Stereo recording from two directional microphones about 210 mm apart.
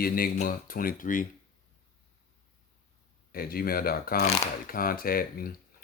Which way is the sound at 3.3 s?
45° left (ahead or behind).